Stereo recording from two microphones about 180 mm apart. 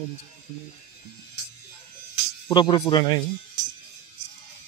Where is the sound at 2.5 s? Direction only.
25° left (ahead or behind).